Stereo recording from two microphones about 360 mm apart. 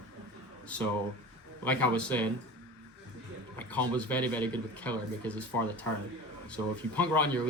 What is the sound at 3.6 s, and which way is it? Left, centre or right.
A man's voice, centre.